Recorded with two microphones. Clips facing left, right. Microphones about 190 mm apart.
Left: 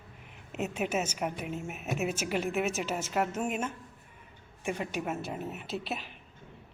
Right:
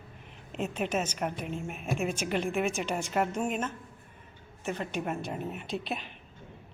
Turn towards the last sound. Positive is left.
turn(degrees=5)  # may be behind; listen again after turning